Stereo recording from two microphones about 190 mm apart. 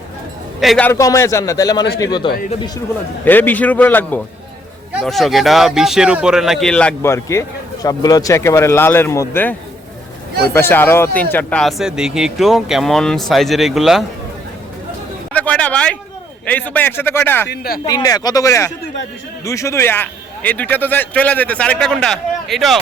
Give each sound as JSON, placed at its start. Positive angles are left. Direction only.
{"t": 0.6, "sound": "speech", "side_deg": 0}
{"t": 0.9, "sound": "a man's voice", "side_deg": 15}
{"t": 3.2, "sound": "a man's voice", "side_deg": 10}
{"t": 4.9, "sound": "speech", "side_deg": 0}
{"t": 15.3, "sound": "a sound", "side_deg": 5}
{"t": 16.5, "sound": "a man's voice", "side_deg": 10}
{"t": 17.5, "sound": "speech", "side_deg": 55}
{"t": 17.8, "sound": "a man's voice", "side_deg": 20}